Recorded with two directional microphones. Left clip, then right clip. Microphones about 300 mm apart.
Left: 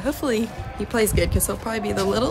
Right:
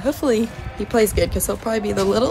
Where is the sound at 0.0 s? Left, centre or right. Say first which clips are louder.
Right 4 dB; centre.